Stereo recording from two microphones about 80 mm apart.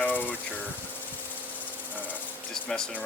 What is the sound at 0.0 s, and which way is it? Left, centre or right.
Insect, left.